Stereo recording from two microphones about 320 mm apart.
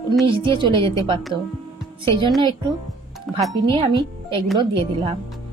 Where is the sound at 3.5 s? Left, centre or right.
Centre.